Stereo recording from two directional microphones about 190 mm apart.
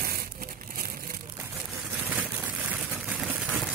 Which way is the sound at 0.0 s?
50° right (ahead or behind).